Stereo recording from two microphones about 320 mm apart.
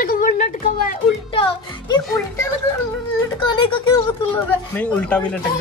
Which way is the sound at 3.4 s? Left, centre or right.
Centre.